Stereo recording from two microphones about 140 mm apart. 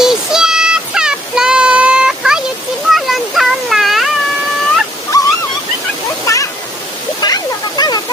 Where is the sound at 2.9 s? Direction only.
Centre (ahead or behind).